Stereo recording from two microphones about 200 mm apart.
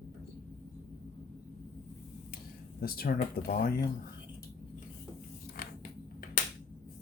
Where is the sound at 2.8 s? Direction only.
50° left (ahead or behind).